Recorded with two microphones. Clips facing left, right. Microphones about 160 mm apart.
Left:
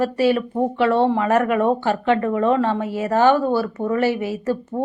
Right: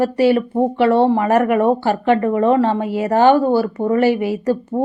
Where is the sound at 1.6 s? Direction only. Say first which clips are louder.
Right 3 dB; 10° right (ahead or behind).